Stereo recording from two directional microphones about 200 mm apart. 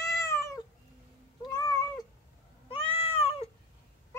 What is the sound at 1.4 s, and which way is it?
Cat, 20° left (ahead or behind).